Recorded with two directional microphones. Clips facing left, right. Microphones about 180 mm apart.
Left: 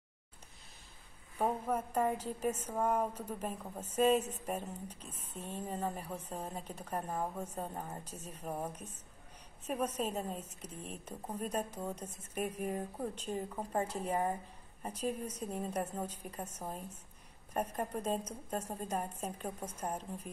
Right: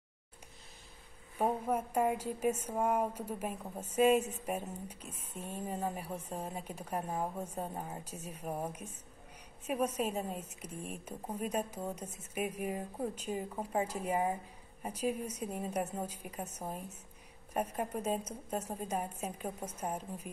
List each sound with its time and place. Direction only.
1.4 s a woman's voice: 10° right (ahead or behind)